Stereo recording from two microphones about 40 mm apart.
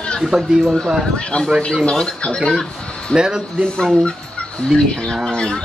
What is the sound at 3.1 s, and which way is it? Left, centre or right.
Speech, right.